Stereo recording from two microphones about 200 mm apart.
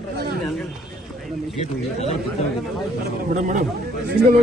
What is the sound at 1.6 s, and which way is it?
Speech, 30° left (ahead or behind).